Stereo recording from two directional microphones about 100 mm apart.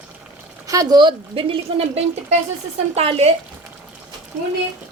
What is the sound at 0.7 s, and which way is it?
A woman's voice, 40° right (ahead or behind).